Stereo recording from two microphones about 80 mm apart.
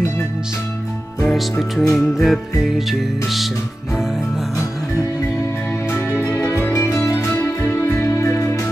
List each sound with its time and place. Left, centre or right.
1.2 s speech: centre
2.0 s music: centre
5.9 s music: left